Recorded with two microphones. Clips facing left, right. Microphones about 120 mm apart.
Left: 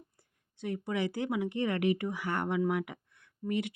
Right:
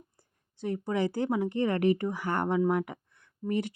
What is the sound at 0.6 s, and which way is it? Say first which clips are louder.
Speech: right 4 dB; 35° right (ahead or behind).